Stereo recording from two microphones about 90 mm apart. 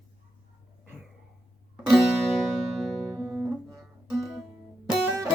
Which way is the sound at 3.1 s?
20° right (ahead or behind).